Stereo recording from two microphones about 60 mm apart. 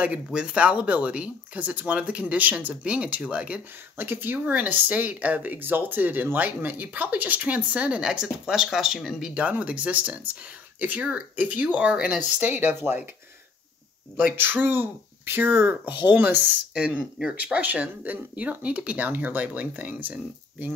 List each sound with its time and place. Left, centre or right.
0.0 s speech: centre
3.9 s speech: right
8.0 s speech: centre
9.3 s speech: right
12.2 s speech: right
14.3 s speech: right
16.7 s speech: centre